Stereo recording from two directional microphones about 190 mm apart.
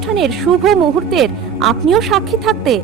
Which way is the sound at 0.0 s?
Centre (ahead or behind).